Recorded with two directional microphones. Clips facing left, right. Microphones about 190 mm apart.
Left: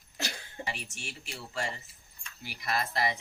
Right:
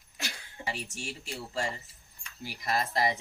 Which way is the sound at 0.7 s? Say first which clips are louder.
Right 6 dB; 35° right (ahead or behind).